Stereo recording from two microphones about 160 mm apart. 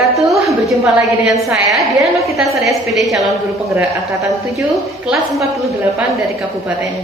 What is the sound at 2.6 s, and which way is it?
Speech, centre (ahead or behind).